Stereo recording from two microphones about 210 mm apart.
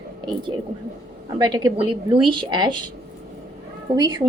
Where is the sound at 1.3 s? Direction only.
20° right (ahead or behind).